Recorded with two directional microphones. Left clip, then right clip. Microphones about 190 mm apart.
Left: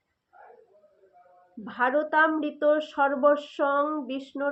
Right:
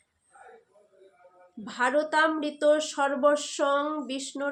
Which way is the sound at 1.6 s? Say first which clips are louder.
Left 1 dB; 30° right (ahead or behind).